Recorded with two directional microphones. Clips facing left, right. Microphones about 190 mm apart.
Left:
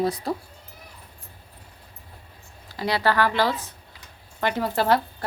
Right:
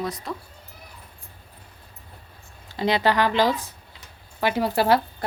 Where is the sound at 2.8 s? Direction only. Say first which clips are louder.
Right 2 dB; 20° right (ahead or behind).